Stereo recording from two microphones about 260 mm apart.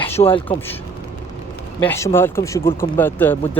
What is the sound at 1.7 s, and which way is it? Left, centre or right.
Speech, centre.